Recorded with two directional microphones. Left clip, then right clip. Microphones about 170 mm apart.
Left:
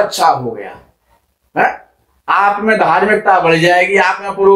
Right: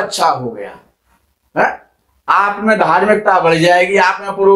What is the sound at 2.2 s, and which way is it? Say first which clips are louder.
A man's voice: left 1 dB; 30° right (ahead or behind).